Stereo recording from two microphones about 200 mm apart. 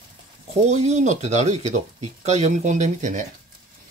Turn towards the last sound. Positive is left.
turn(degrees=-40)  # may be behind; listen again after turning